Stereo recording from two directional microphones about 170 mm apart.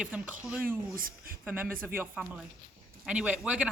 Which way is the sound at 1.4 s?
10° right (ahead or behind).